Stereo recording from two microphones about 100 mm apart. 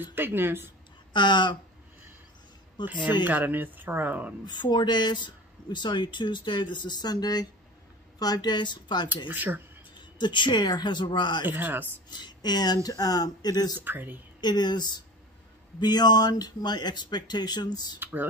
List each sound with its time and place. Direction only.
0.0 s speech: 20° right (ahead or behind)
1.1 s speech: 50° left (ahead or behind)
2.8 s speech: 15° right (ahead or behind)
4.5 s speech: 45° left (ahead or behind)
9.3 s speech: 20° right (ahead or behind)
10.1 s speech: 50° left (ahead or behind)
11.4 s speech: 20° right (ahead or behind)
12.1 s speech: 45° left (ahead or behind)
13.7 s speech: 20° right (ahead or behind)
14.4 s speech: 45° left (ahead or behind)
17.9 s speech: 20° right (ahead or behind)